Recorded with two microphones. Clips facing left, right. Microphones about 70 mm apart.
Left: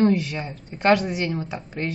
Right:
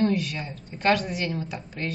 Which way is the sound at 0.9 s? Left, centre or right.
Centre.